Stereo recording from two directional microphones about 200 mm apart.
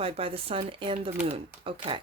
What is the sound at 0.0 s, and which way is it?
Speech, 30° right (ahead or behind).